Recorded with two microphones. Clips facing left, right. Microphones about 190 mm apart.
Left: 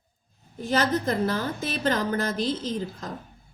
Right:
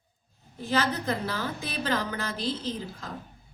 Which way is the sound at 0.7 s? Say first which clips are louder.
Left 3 dB; 45° left (ahead or behind).